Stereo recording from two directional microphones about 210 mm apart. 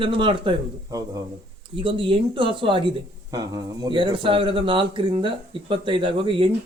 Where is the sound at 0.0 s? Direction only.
25° right (ahead or behind).